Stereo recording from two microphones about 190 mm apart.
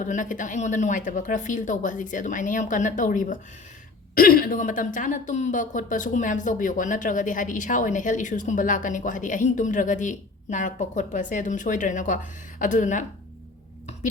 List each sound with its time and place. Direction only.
0.0 s a woman's voice: 45° left (ahead or behind)